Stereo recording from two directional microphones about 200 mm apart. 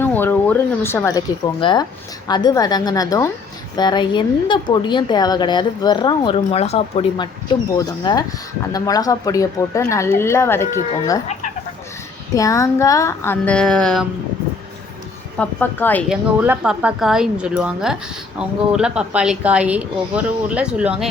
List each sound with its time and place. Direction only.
0.0 s a woman's voice: 10° left (ahead or behind); by 7.3 s 30° left (ahead or behind)
7.8 s speech: 20° left (ahead or behind)
12.3 s speech: 15° left (ahead or behind)
15.4 s speech: 10° left (ahead or behind)
16.0 s a woman's voice: 5° right (ahead or behind)